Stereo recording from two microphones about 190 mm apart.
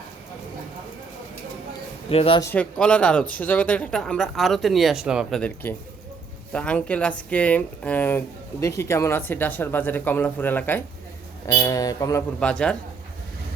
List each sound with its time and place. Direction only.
2.0 s a man's voice: 30° left (ahead or behind)
2.4 s speech: 10° left (ahead or behind)
12.4 s speech: 5° left (ahead or behind)